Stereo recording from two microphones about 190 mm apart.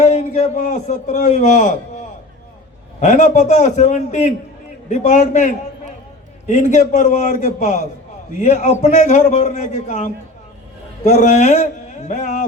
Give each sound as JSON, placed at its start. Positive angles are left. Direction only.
{"t": 0.0, "sound": "a man's voice", "side_deg": 35}
{"t": 3.0, "sound": "a man's voice", "side_deg": 40}